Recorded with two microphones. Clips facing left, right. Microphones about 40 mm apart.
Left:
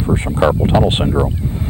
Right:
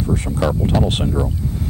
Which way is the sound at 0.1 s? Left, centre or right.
Left.